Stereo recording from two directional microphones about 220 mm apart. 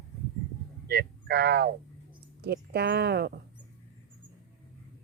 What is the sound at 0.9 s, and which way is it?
Speech, 45° right (ahead or behind).